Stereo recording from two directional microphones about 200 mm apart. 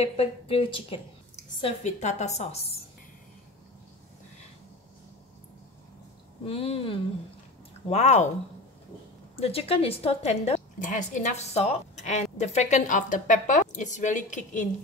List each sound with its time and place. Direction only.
0.0 s a woman's voice: 30° left (ahead or behind)
6.4 s a woman's voice: 30° left (ahead or behind)
9.4 s a woman's voice: 30° left (ahead or behind)